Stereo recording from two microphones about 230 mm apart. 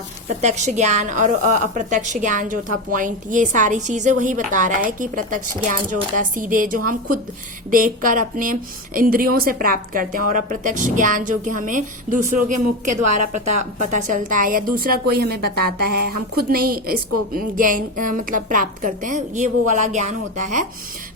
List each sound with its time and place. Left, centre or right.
0.4 s a woman's voice: right